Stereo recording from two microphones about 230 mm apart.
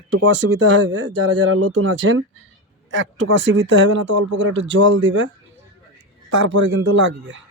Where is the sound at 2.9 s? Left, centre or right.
Right.